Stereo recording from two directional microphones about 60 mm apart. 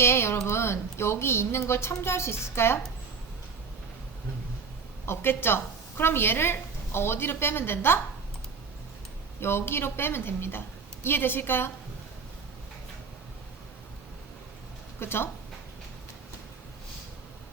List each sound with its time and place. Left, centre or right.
0.0 s speech: left
5.0 s a woman's voice: left
9.4 s a woman's voice: left
14.9 s a woman's voice: left